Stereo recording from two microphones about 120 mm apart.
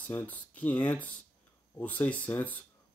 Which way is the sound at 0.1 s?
15° left (ahead or behind).